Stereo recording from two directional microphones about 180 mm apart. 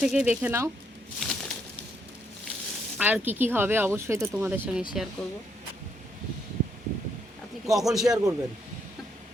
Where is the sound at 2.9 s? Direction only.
10° right (ahead or behind).